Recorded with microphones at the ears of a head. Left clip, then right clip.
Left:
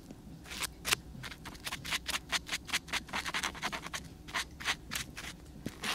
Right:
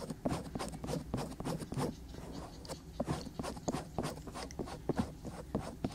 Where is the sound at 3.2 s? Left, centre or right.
Left.